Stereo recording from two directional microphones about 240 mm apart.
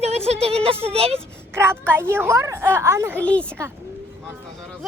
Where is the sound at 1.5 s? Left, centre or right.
Centre.